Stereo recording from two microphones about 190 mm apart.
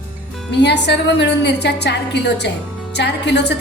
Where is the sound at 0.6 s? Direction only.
65° left (ahead or behind).